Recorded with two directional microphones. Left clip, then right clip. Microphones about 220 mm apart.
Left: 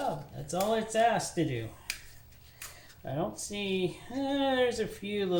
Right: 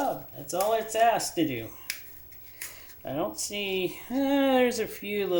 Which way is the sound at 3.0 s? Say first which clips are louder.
Right 4 dB; 30° right (ahead or behind).